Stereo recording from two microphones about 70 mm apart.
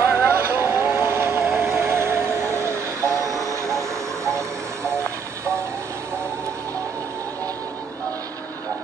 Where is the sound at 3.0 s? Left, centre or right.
Right.